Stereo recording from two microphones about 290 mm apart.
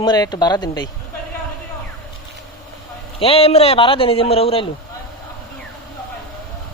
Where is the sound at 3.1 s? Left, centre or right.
Centre.